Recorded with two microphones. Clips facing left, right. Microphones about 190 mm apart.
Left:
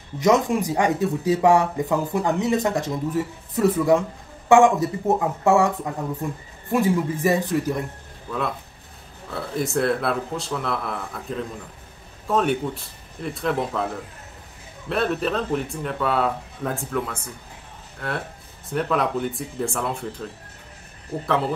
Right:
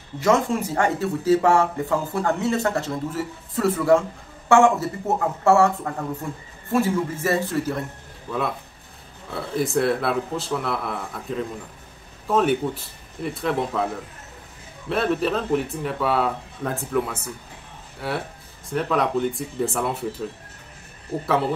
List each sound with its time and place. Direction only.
0.2 s speech: 15° left (ahead or behind)
9.3 s speech: centre (ahead or behind)
14.9 s speech: centre (ahead or behind)